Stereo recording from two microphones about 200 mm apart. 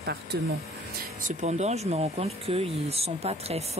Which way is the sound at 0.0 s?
55° right (ahead or behind).